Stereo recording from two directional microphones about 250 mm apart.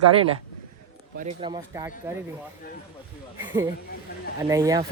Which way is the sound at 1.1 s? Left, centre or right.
Right.